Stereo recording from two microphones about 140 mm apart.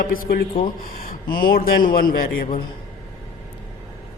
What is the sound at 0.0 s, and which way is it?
A man's voice, 90° left.